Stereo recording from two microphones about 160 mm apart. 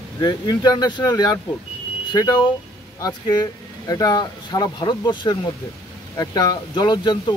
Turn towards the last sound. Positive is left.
turn(degrees=25)  # may be behind; listen again after turning